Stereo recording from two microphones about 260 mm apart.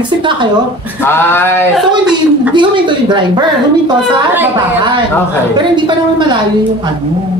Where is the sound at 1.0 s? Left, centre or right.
Centre.